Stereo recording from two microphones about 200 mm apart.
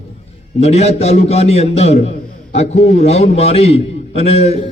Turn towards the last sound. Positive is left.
turn(degrees=30)  # may be behind; listen again after turning